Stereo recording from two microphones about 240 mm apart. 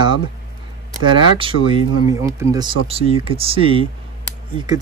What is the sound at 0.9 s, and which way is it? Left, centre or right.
Speech, right.